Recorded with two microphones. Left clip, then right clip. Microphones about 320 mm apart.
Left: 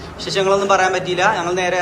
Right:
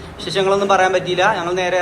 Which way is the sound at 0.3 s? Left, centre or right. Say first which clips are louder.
Even; centre.